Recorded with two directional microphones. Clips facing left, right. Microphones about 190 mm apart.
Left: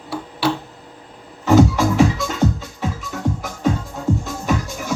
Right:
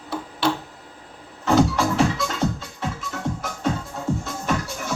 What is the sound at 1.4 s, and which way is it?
Music, centre (ahead or behind).